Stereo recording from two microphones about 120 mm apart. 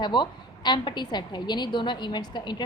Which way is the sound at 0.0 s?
40° left (ahead or behind).